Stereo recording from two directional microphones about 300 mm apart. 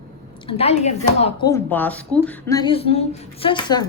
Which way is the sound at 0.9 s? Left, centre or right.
Centre.